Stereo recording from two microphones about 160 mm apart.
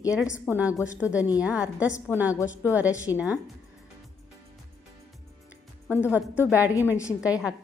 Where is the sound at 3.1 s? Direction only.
25° left (ahead or behind).